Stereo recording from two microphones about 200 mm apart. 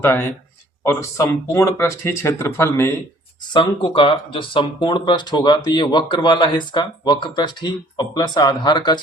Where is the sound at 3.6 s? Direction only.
25° left (ahead or behind).